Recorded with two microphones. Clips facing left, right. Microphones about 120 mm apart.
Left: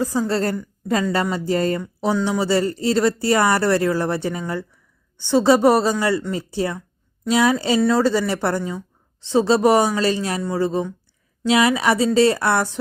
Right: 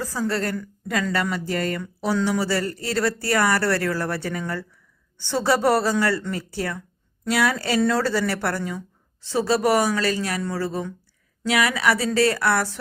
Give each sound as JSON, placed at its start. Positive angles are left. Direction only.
{"t": 0.0, "sound": "a woman's voice", "side_deg": 20}